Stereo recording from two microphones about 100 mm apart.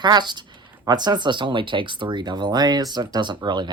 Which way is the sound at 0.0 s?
45° right (ahead or behind).